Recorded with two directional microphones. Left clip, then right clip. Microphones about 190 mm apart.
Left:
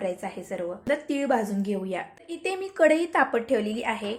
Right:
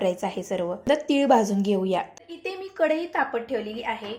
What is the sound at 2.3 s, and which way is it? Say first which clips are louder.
A woman's voice: left 3 dB; 25° left (ahead or behind).